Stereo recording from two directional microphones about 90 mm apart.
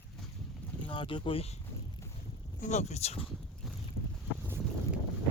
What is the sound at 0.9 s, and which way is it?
Speech, 70° left (ahead or behind).